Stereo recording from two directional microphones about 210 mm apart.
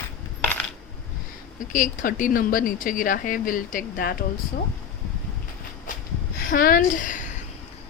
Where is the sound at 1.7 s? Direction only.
40° left (ahead or behind).